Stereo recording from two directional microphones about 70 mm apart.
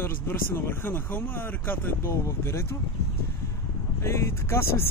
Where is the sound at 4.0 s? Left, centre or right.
Left.